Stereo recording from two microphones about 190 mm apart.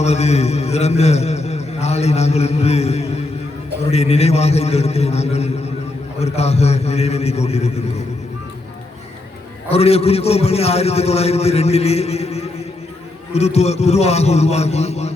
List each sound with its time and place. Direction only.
0.0 s a man's voice: 35° left (ahead or behind)
9.6 s a man's voice: 35° left (ahead or behind)